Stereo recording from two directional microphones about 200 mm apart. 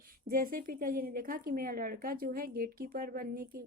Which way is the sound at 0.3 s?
45° right (ahead or behind).